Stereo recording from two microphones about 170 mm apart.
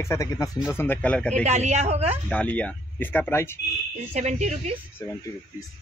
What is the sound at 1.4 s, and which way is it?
Speech, 40° right (ahead or behind).